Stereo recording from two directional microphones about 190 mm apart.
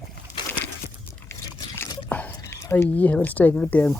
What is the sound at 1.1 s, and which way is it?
Biting, 15° left (ahead or behind).